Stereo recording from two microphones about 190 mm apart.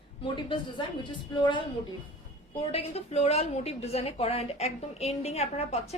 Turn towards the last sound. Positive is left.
turn(degrees=35)  # may be behind; listen again after turning